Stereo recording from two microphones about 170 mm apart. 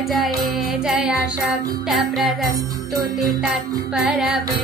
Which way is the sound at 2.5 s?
20° right (ahead or behind).